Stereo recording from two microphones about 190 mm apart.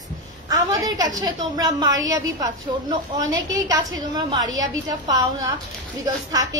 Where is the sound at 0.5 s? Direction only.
20° right (ahead or behind).